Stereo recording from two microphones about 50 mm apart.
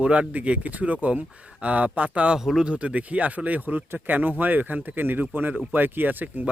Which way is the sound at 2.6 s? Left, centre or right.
Right.